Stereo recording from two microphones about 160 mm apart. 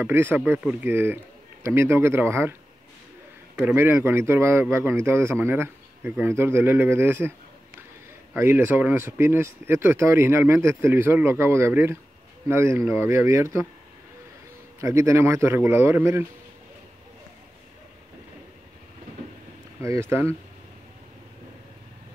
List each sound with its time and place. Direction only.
0.0 s a man's voice: 15° right (ahead or behind)
3.5 s a man's voice: 15° right (ahead or behind)
8.4 s a man's voice: 15° right (ahead or behind)
14.8 s a man's voice: 20° right (ahead or behind)
19.8 s a man's voice: 15° right (ahead or behind)